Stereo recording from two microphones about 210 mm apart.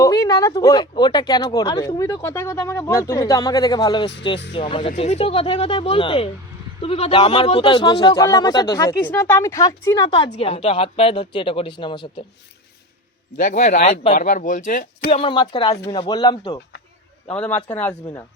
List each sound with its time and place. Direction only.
0.0 s speech: 15° left (ahead or behind)
13.3 s speech: 40° left (ahead or behind)
15.2 s speech: 20° left (ahead or behind)
17.3 s speech: 5° left (ahead or behind)